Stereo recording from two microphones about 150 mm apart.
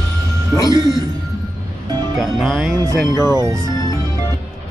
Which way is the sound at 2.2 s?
Centre (ahead or behind).